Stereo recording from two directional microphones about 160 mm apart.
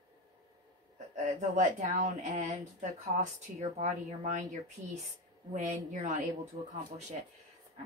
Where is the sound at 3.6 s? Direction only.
45° right (ahead or behind).